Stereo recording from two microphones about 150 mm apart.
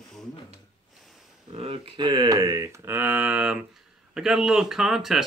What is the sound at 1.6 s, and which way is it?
Speech, 35° right (ahead or behind).